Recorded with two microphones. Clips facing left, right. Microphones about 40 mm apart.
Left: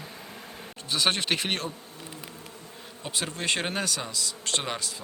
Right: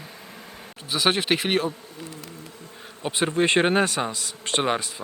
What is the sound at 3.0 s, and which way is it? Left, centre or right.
Speech, right.